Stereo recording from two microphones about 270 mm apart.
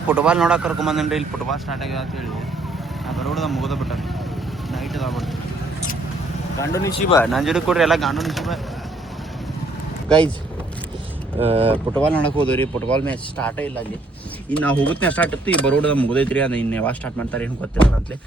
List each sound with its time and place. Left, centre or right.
0.1 s speech: centre
3.1 s speech: centre
6.6 s speech: centre
7.3 s speech: centre
11.3 s speech: right
12.1 s speech: centre